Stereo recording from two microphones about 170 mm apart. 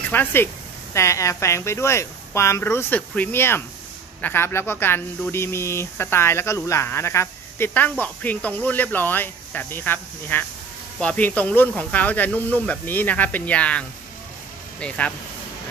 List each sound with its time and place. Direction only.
0.1 s speech: 10° left (ahead or behind)